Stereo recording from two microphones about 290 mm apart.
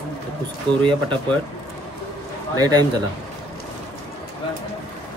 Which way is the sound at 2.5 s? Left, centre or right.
Centre.